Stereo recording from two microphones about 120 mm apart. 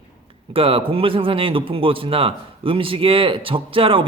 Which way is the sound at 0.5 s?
50° right (ahead or behind).